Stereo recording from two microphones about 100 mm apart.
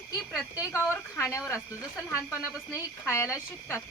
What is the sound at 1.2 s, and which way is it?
Speech, 25° left (ahead or behind).